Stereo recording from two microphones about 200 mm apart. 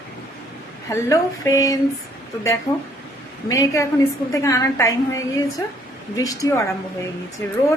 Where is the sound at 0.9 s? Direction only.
15° left (ahead or behind).